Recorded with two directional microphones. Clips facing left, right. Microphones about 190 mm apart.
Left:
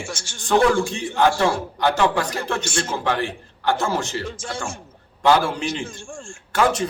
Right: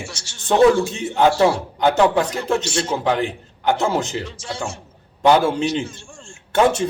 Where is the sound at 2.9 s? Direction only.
20° right (ahead or behind).